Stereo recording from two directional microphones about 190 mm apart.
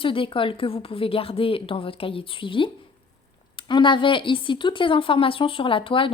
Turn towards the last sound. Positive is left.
turn(degrees=25)  # may be behind; listen again after turning